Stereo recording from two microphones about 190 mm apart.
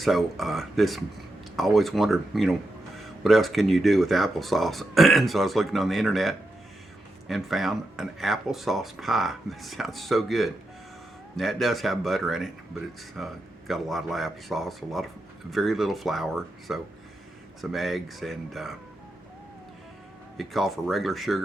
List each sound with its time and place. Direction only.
0.0 s speech: centre (ahead or behind)
20.3 s speech: centre (ahead or behind)